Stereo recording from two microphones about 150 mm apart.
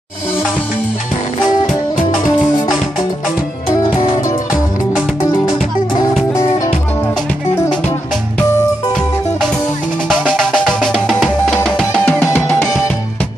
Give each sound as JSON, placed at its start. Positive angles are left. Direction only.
{"t": 6.3, "sound": "music", "side_deg": 20}
{"t": 10.0, "sound": "music", "side_deg": 0}